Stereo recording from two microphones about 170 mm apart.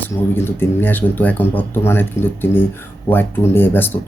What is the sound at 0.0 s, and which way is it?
Speech, 10° left (ahead or behind).